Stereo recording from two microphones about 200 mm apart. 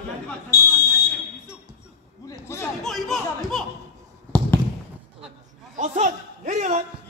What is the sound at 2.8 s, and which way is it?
Speech, centre (ahead or behind).